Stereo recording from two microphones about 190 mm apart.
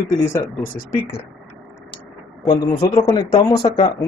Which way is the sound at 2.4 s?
20° left (ahead or behind).